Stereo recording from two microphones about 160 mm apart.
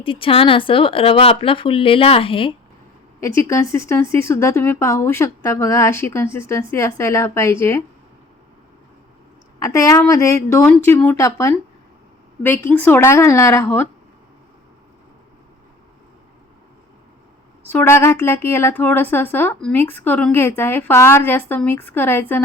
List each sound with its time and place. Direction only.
0.0 s speech: 35° left (ahead or behind)
3.2 s speech: 20° left (ahead or behind)
9.6 s speech: 20° left (ahead or behind)
17.7 s speech: 15° left (ahead or behind)